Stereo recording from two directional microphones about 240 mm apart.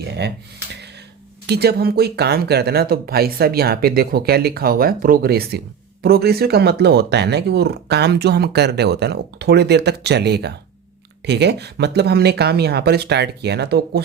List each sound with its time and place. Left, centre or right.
0.0 s speech: right
1.5 s speech: right